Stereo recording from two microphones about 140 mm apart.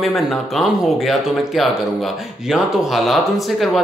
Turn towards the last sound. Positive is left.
turn(degrees=0)  # may be behind; listen again after turning